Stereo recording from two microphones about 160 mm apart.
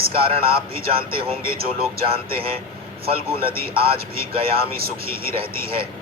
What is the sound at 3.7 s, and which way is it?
Speech, 35° right (ahead or behind).